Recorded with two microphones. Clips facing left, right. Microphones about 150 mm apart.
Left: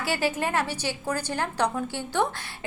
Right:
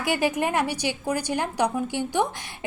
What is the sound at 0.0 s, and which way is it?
A woman's voice, 15° right (ahead or behind).